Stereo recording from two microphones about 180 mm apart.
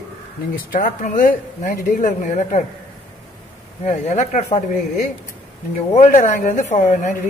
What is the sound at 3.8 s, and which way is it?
Speech, 40° left (ahead or behind).